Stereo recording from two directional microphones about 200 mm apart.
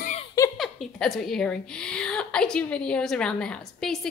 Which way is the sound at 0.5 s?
Centre (ahead or behind).